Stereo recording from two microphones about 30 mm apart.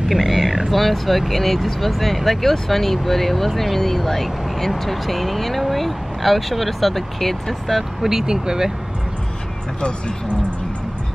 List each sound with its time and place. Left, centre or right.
0.1 s wild animals: centre
0.7 s speech: centre
8.0 s speech: centre
9.8 s speech: left